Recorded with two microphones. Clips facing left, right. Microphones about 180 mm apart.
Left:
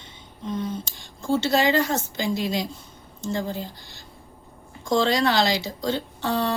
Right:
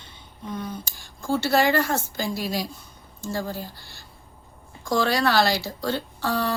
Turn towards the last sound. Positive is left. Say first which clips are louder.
# left 1 dB
turn(degrees=25)  # may be behind; listen again after turning